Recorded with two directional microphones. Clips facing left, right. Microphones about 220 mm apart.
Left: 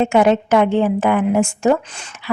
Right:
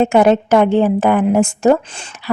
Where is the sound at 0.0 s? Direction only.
40° right (ahead or behind).